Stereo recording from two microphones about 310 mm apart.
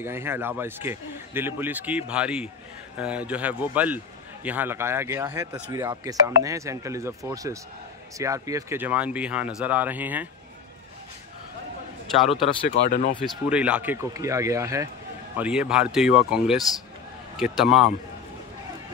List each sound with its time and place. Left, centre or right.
0.0 s a man's voice: centre
12.2 s speech: centre
12.8 s speech: left
13.2 s a man's voice: centre